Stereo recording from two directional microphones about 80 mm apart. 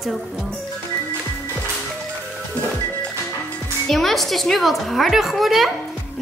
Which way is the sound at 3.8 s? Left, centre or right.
Centre.